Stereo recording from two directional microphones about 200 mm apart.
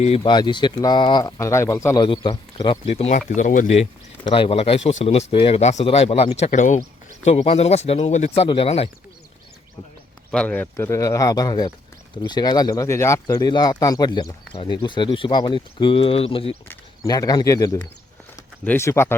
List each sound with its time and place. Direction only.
0.2 s speech: 20° left (ahead or behind)
10.3 s speech: 5° left (ahead or behind); by 16.6 s 30° left (ahead or behind)
16.6 s speech: 15° left (ahead or behind)